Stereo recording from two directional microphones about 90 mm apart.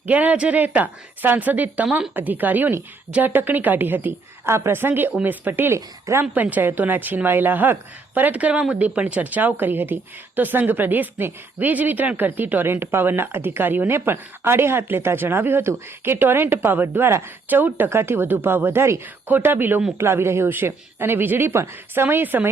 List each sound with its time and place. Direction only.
0.0 s speech: 15° right (ahead or behind)
6.3 s speech: 20° right (ahead or behind)